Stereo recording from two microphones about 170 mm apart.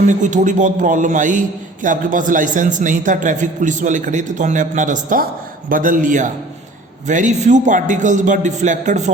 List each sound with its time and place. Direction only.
0.1 s a man's voice: 45° right (ahead or behind)